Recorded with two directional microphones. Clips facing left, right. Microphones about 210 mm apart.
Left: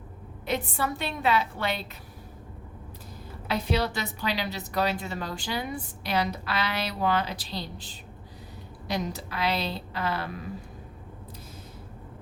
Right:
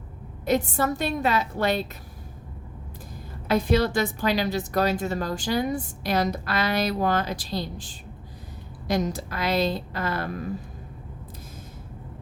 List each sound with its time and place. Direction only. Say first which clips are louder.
0.4 s a woman's voice: right 6 dB; 45° right (ahead or behind)
3.5 s a woman's voice: right 6 dB; 45° right (ahead or behind)